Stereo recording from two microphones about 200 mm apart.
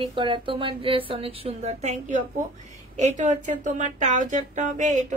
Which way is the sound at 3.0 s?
35° right (ahead or behind).